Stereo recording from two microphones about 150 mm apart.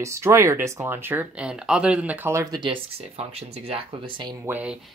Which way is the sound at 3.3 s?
40° right (ahead or behind).